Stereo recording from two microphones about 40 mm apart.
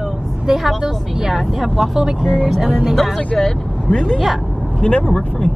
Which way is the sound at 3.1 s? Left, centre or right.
Centre.